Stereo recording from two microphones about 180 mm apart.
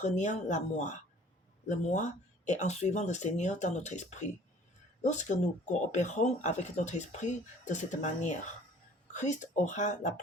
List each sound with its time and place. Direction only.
0.0 s speech: 40° left (ahead or behind)